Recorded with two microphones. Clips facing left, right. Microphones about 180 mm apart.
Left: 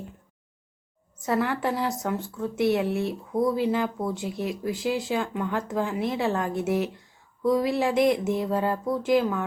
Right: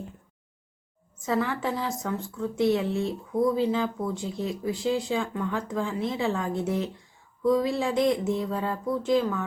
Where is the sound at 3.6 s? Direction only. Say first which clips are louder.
Left 1 dB; 10° left (ahead or behind).